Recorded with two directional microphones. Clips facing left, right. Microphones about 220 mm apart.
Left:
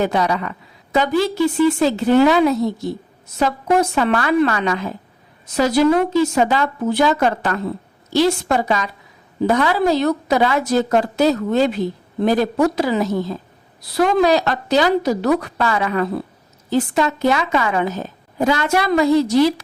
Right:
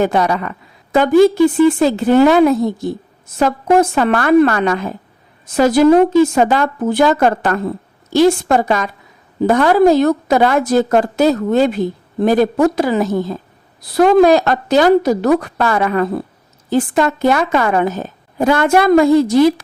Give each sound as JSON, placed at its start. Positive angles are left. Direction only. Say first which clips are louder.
{"t": 0.0, "sound": "speech", "louder": "right 3 dB", "side_deg": -50}